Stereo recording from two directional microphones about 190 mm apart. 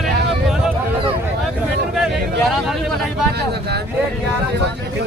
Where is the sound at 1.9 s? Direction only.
Centre (ahead or behind).